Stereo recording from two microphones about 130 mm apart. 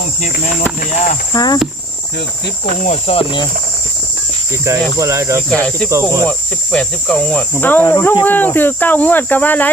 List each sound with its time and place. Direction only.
0.2 s cricket: 85° left
1.3 s cricket: 30° left (ahead or behind)
2.9 s speech: 45° left (ahead or behind)
4.6 s cricket: 25° right (ahead or behind)
5.5 s speech: 5° left (ahead or behind)
5.9 s cricket: 25° right (ahead or behind)
6.2 s speech: 5° left (ahead or behind); by 8.2 s 25° left (ahead or behind)
8.2 s speech: 15° left (ahead or behind)